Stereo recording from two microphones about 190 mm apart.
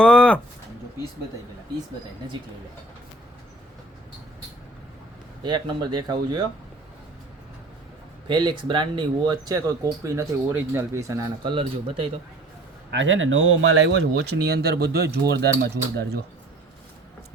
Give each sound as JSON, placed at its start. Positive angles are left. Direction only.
{"t": 0.0, "sound": "a sound", "side_deg": 5}
{"t": 5.4, "sound": "speech", "side_deg": -25}
{"t": 8.3, "sound": "speech", "side_deg": -25}
{"t": 12.9, "sound": "speech", "side_deg": -75}